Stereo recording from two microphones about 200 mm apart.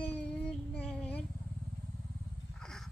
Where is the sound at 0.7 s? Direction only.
5° left (ahead or behind).